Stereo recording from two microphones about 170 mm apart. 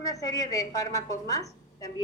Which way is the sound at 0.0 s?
20° left (ahead or behind).